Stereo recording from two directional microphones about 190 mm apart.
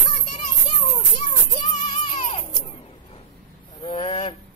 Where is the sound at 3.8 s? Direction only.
30° left (ahead or behind).